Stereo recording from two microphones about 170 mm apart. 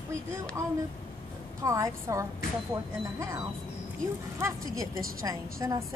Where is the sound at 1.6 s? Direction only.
15° right (ahead or behind).